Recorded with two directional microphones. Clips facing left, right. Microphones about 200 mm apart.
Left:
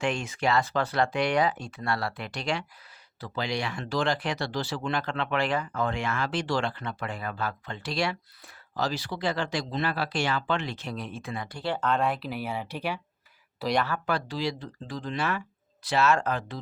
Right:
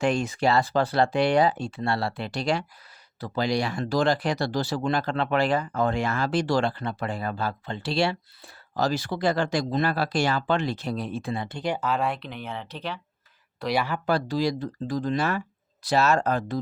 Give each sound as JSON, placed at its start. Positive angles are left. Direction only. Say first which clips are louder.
{"t": 0.0, "sound": "speech", "louder": "right 5 dB", "side_deg": -35}
{"t": 8.7, "sound": "speech", "louder": "right 5 dB", "side_deg": -45}
{"t": 13.6, "sound": "speech", "louder": "right 1 dB", "side_deg": 0}
{"t": 14.1, "sound": "speech", "louder": "right 5 dB", "side_deg": -40}